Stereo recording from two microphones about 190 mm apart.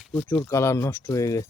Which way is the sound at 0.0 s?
10° left (ahead or behind).